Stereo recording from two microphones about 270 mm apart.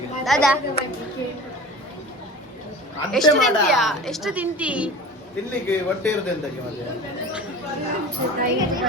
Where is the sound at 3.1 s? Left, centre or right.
Centre.